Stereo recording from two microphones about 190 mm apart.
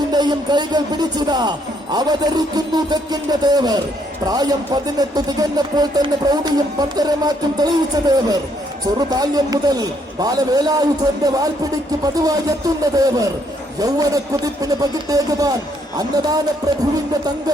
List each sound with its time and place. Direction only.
0.1 s a man's voice: 20° right (ahead or behind)
9.0 s a man's voice: 20° right (ahead or behind)